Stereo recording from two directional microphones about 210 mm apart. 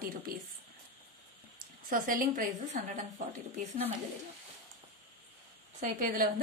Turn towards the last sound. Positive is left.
turn(degrees=-45)  # may be behind; listen again after turning